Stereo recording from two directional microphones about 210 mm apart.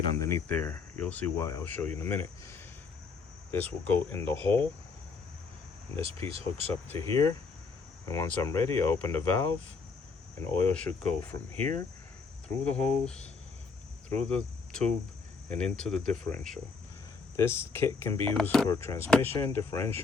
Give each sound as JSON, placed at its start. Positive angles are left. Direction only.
{"t": 0.2, "sound": "speech", "side_deg": 15}
{"t": 6.0, "sound": "speech", "side_deg": -30}
{"t": 6.8, "sound": "speech", "side_deg": 10}
{"t": 14.3, "sound": "speech", "side_deg": 5}
{"t": 18.7, "sound": "speech", "side_deg": 15}